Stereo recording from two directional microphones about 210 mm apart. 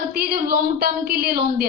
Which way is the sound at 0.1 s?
45° right (ahead or behind).